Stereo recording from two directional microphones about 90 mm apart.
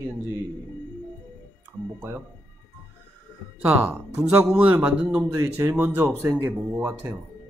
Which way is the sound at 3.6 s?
25° right (ahead or behind).